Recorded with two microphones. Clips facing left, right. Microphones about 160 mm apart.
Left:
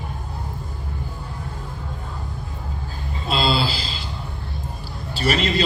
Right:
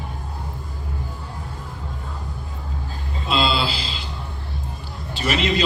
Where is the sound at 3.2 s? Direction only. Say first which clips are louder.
Even; 40° left (ahead or behind).